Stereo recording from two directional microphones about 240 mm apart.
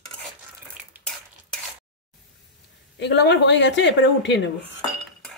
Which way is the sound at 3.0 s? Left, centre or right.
Left.